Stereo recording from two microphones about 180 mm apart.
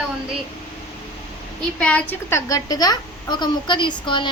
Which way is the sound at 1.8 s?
5° left (ahead or behind).